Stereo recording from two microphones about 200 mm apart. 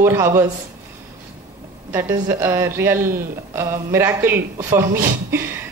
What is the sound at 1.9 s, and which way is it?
A woman's voice, 15° right (ahead or behind).